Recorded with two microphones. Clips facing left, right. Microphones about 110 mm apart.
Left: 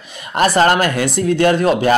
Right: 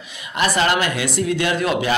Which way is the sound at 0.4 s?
45° left (ahead or behind).